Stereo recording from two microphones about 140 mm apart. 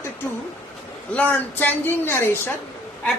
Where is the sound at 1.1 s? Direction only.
10° left (ahead or behind).